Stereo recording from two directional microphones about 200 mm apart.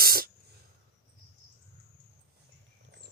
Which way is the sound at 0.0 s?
50° right (ahead or behind).